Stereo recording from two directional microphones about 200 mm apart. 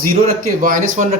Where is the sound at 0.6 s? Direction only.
40° right (ahead or behind).